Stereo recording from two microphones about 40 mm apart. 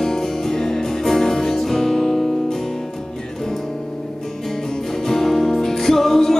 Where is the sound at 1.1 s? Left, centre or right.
Centre.